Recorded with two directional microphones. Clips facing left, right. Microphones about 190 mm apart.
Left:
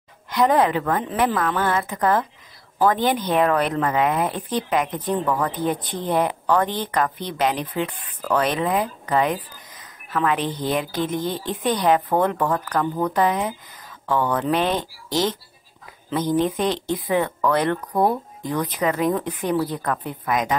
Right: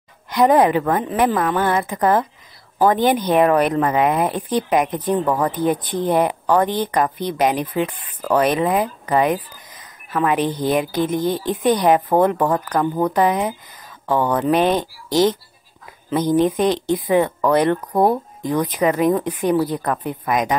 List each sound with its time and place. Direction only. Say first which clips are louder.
0.3 s a woman's voice: right 4 dB; 15° right (ahead or behind)